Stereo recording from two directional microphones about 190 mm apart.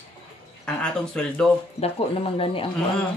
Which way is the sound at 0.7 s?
5° left (ahead or behind).